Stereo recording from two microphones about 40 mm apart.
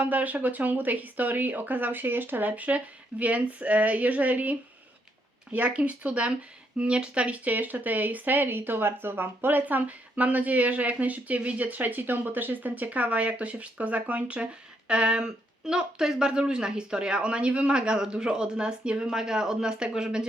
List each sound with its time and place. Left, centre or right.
0.0 s speech: right
2.5 s speech: right
7.5 s speech: right
11.6 s speech: right; by 20.2 s centre